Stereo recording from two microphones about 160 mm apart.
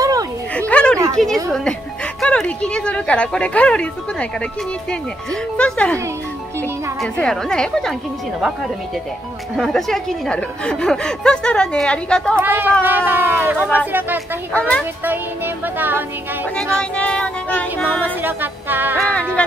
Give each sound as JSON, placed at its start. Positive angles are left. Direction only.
{"t": 0.0, "sound": "a sound", "side_deg": -20}
{"t": 0.6, "sound": "a sound", "side_deg": 5}
{"t": 1.1, "sound": "a woman's voice", "side_deg": 5}
{"t": 7.0, "sound": "a woman's voice", "side_deg": 5}
{"t": 9.6, "sound": "a woman's voice", "side_deg": 0}
{"t": 12.4, "sound": "music", "side_deg": -10}
{"t": 14.5, "sound": "a woman's voice", "side_deg": 5}
{"t": 15.0, "sound": "music", "side_deg": -10}
{"t": 16.5, "sound": "a woman's voice", "side_deg": 5}
{"t": 18.2, "sound": "music", "side_deg": -10}